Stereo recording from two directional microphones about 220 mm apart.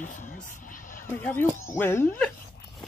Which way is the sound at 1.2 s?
10° left (ahead or behind).